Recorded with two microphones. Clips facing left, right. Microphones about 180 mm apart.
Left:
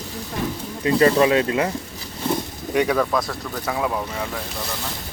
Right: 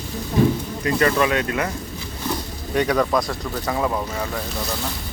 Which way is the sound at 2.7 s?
5° left (ahead or behind).